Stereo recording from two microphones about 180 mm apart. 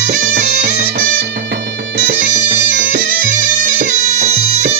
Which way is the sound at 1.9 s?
70° right (ahead or behind).